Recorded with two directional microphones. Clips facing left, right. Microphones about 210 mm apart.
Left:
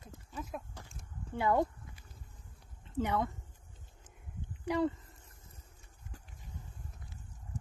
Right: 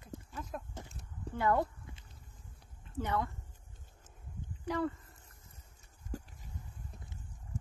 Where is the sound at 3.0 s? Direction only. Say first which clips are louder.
Left 2 dB; 15° left (ahead or behind).